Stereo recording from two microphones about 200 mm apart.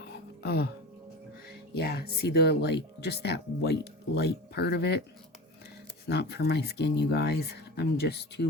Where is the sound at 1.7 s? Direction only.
50° left (ahead or behind).